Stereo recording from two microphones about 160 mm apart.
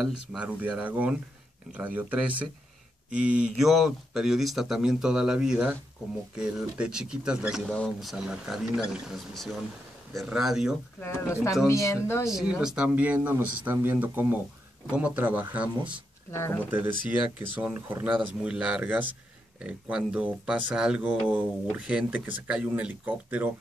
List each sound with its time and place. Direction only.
0.0 s speech: 5° right (ahead or behind)
11.0 s speech: 15° left (ahead or behind)
12.3 s speech: 5° right (ahead or behind)
16.3 s speech: 15° left (ahead or behind)
17.4 s speech: 10° right (ahead or behind)